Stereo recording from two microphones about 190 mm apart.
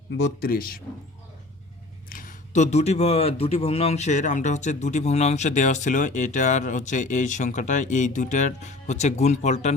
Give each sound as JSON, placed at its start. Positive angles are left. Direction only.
{"t": 0.3, "sound": "speech", "side_deg": 50}
{"t": 2.0, "sound": "speech", "side_deg": 45}